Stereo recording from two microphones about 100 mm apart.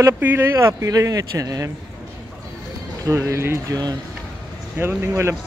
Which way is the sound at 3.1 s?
25° right (ahead or behind).